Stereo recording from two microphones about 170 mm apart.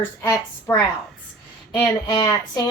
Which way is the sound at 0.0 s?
15° left (ahead or behind).